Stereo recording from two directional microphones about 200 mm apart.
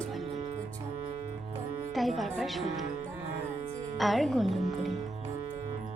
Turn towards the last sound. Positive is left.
turn(degrees=0)  # may be behind; listen again after turning